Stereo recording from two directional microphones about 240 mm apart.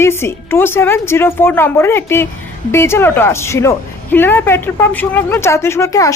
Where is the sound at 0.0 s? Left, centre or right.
Centre.